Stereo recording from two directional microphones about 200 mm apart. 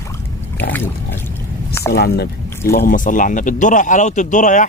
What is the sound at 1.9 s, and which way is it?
A man's voice, 55° left (ahead or behind).